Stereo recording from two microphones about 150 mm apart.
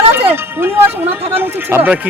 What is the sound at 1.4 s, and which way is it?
Speech, 15° right (ahead or behind).